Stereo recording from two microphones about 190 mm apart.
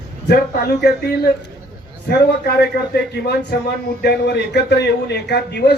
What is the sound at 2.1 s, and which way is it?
A man's voice, 60° left (ahead or behind).